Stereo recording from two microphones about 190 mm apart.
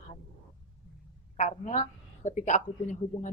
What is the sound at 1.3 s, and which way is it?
A woman's voice, 40° left (ahead or behind).